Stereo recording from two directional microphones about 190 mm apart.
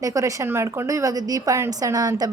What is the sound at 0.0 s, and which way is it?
A woman's voice, 15° right (ahead or behind).